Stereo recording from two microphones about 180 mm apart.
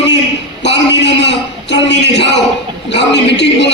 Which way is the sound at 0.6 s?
75° left (ahead or behind).